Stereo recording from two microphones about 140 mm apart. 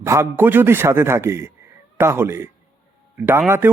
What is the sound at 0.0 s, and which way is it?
A man's voice, 20° right (ahead or behind).